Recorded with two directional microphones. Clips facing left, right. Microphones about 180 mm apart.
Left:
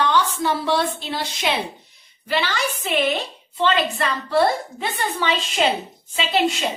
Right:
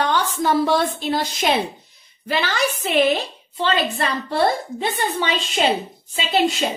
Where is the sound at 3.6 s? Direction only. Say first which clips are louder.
Left 1 dB; 35° right (ahead or behind).